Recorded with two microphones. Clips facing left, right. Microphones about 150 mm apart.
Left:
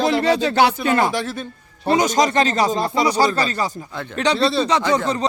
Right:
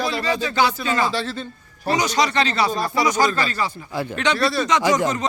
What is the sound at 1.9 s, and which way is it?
Speech, 50° left (ahead or behind).